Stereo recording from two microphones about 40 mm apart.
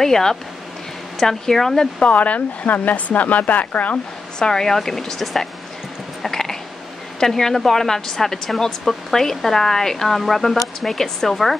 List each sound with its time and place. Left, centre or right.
0.0 s speech: centre
2.0 s speech: left
4.4 s speech: centre
6.2 s a sound: centre
7.2 s speech: centre